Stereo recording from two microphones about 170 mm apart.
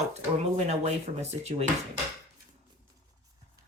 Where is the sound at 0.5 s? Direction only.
40° right (ahead or behind).